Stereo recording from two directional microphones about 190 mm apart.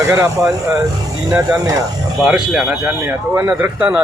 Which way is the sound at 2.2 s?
Centre (ahead or behind).